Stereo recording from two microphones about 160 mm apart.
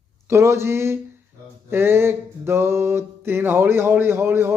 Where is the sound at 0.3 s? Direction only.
15° right (ahead or behind).